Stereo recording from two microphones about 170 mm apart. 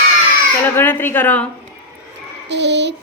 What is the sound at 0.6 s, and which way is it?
Speech, 15° left (ahead or behind).